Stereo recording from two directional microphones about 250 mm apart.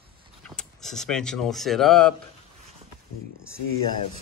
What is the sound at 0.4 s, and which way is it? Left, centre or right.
Speech, centre.